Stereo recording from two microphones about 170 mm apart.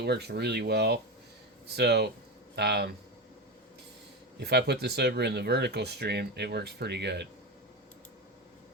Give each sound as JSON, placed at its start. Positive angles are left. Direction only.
{"t": 0.0, "sound": "speech", "side_deg": -75}
{"t": 4.4, "sound": "speech", "side_deg": -75}